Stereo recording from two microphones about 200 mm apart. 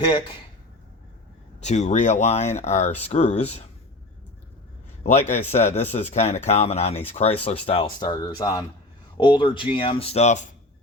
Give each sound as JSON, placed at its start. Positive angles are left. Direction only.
{"t": 0.0, "sound": "speech", "side_deg": 20}
{"t": 1.6, "sound": "speech", "side_deg": 35}
{"t": 5.3, "sound": "speech", "side_deg": 35}